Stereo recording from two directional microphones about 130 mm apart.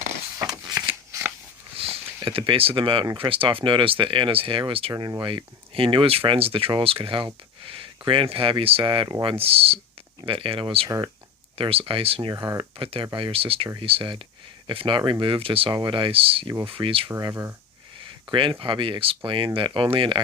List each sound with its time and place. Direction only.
0.3 s a sound: 25° right (ahead or behind)
1.1 s scissors: 20° right (ahead or behind)
1.8 s a sound: 50° right (ahead or behind)
2.2 s speech: 45° right (ahead or behind)
4.9 s speech: 30° right (ahead or behind)
12.3 s speech: 25° right (ahead or behind)
12.7 s speech: 40° right (ahead or behind)
17.1 s speech: 25° right (ahead or behind)
18.0 s a sound: 40° right (ahead or behind)
18.6 s speech: 40° right (ahead or behind)